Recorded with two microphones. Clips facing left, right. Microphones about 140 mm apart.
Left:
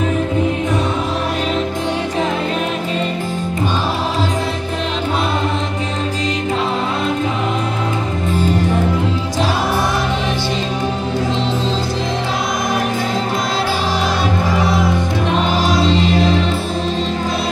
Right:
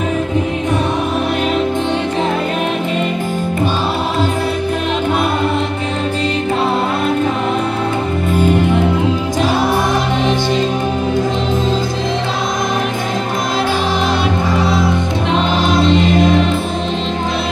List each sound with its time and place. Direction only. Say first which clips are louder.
8.4 s music: right 4 dB; 55° right (ahead or behind)
15.6 s music: right 2 dB; 55° right (ahead or behind)